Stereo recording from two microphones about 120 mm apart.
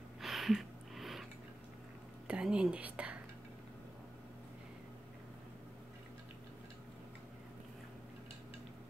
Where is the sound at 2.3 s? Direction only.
5° right (ahead or behind).